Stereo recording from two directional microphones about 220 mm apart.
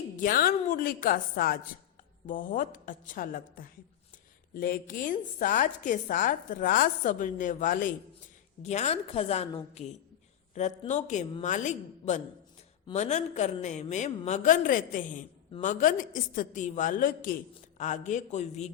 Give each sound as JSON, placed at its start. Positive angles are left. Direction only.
{"t": 0.2, "sound": "a woman's voice", "side_deg": 40}